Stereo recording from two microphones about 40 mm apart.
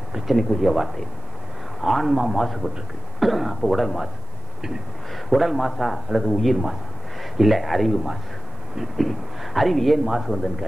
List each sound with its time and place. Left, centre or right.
0.3 s speech: centre
1.8 s a man's voice: centre
2.0 s a man's voice: centre
2.3 s speech: centre
5.3 s speech: centre